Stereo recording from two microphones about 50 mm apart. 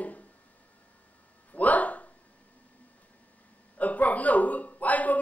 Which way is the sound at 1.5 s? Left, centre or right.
Left.